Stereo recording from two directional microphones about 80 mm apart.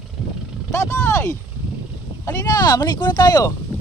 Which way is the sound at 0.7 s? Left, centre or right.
Left.